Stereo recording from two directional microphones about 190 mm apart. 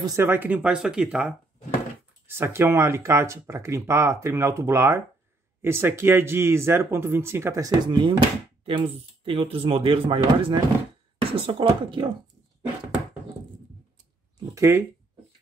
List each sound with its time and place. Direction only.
0.0 s speech: 15° right (ahead or behind)
14.5 s speech: 15° right (ahead or behind)